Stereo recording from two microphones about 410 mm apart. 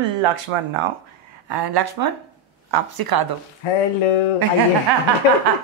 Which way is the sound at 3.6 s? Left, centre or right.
Left.